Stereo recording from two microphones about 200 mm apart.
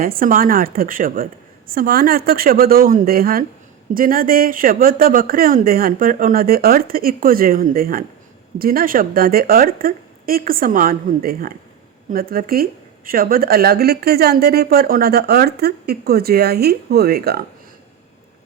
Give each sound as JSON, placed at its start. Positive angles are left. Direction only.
{"t": 0.0, "sound": "speech", "side_deg": -45}